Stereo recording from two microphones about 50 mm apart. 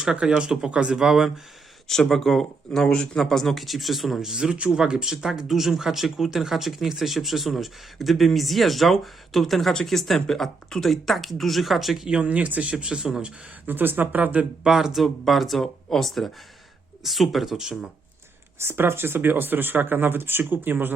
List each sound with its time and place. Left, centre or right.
0.2 s speech: centre
1.0 s speech: centre
1.9 s speech: centre
12.0 s speech: right
12.8 s speech: centre
13.7 s speech: right
14.6 s speech: centre
18.6 s speech: right